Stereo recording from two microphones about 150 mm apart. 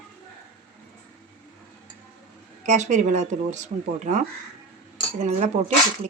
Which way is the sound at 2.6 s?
50° right (ahead or behind).